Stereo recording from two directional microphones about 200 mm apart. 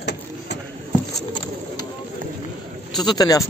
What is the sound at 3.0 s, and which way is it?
Speech, 20° left (ahead or behind).